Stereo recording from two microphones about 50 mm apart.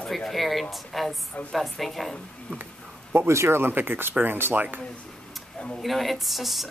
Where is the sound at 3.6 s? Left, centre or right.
Right.